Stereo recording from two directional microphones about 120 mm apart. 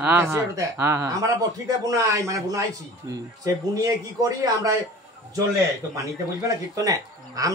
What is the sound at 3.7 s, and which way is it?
Speech, 30° right (ahead or behind).